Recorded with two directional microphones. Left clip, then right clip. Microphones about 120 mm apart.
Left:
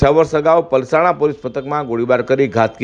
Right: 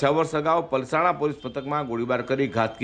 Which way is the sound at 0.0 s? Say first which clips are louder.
Left 10 dB; 35° left (ahead or behind).